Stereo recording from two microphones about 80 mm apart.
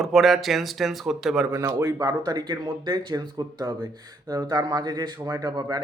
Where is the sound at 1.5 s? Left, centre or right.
Right.